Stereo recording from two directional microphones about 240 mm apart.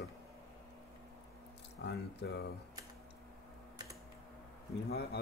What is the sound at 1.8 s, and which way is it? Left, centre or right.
Speech, left.